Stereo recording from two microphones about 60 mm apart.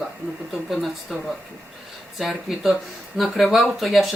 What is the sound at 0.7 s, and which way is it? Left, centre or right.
Speech, centre.